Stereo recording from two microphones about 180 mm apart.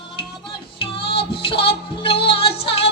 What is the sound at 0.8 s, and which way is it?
Music, 30° left (ahead or behind).